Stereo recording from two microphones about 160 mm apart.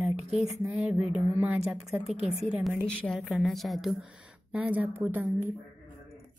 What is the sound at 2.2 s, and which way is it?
Speech, 45° right (ahead or behind).